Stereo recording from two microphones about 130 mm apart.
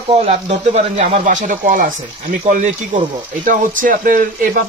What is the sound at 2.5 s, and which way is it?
Speech, 70° right (ahead or behind).